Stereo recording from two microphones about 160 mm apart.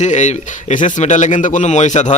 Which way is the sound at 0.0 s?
50° left (ahead or behind).